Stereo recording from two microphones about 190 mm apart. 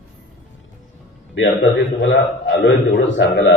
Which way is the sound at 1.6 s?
70° left (ahead or behind).